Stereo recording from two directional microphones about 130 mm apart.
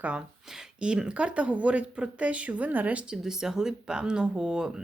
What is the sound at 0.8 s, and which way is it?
Speech, 5° right (ahead or behind).